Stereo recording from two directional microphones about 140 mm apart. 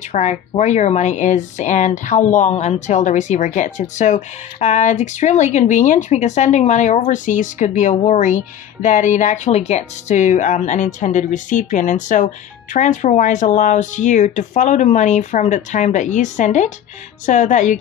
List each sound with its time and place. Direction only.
0.1 s speech: 55° left (ahead or behind)